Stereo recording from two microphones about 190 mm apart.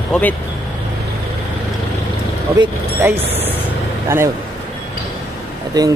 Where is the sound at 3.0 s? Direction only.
10° right (ahead or behind).